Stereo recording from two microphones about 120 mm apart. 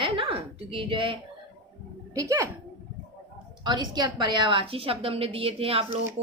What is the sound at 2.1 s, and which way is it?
Speech, 25° right (ahead or behind).